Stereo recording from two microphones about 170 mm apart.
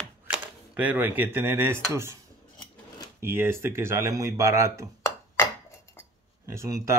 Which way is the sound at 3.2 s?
15° right (ahead or behind).